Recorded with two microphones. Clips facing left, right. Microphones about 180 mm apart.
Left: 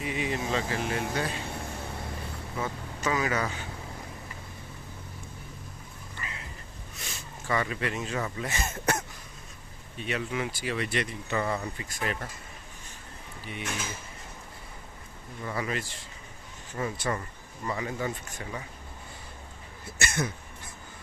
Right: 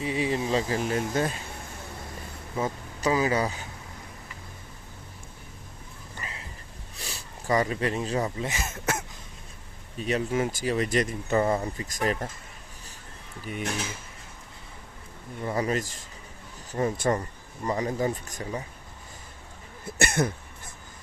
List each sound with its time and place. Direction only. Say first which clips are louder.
0.0 s speech: right 4 dB; 30° right (ahead or behind)
2.6 s speech: right 5 dB; 35° right (ahead or behind)
6.2 s a sound: right 1 dB; 35° right (ahead or behind)
6.9 s speech: right 2 dB; 35° right (ahead or behind)
8.6 s speech: left 1 dB; 5° right (ahead or behind)
10.0 s speech: right 5 dB; 40° right (ahead or behind)
13.4 s speech: right 5 dB; 40° right (ahead or behind)
15.4 s speech: right 5 dB; 40° right (ahead or behind)
20.0 s a sound: right 5 dB; 55° right (ahead or behind)